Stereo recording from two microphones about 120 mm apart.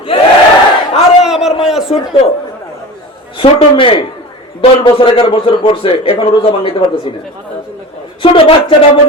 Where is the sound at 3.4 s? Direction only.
45° left (ahead or behind).